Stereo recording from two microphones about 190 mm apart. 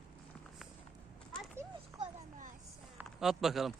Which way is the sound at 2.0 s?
40° right (ahead or behind).